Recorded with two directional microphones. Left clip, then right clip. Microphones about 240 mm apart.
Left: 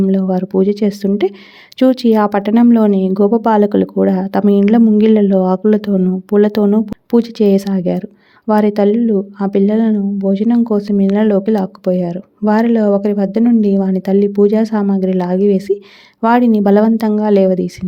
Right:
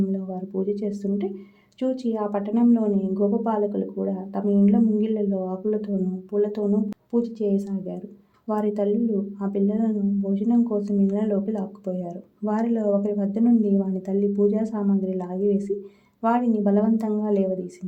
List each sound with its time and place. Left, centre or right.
0.1 s speech: left